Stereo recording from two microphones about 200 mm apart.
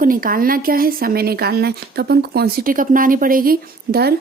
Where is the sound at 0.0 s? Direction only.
45° right (ahead or behind).